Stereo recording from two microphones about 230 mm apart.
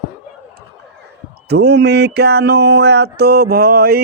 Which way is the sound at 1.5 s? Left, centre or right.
Right.